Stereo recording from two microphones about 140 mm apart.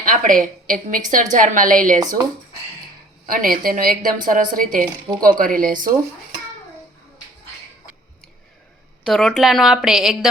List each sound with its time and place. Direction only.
0.0 s a woman's voice: 75° right (ahead or behind)
3.2 s a woman's voice: 90° right
9.0 s a woman's voice: centre (ahead or behind)